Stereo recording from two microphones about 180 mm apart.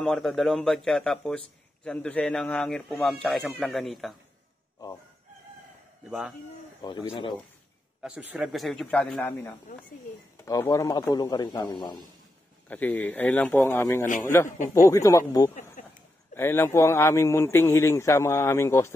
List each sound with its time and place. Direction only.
0.0 s speech: centre (ahead or behind)
6.0 s speech: 5° right (ahead or behind)
6.8 s speech: 25° left (ahead or behind)
8.0 s speech: 10° right (ahead or behind); by 12.0 s 25° left (ahead or behind)
12.6 s a man's voice: 10° left (ahead or behind)
15.8 s a sound: 45° left (ahead or behind)
16.3 s a man's voice: 15° left (ahead or behind)